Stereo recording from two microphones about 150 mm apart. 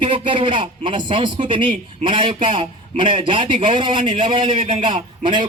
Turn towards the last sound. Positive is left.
turn(degrees=-30)  # may be behind; listen again after turning